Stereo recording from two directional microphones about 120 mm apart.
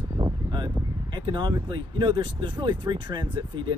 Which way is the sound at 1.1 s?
40° right (ahead or behind).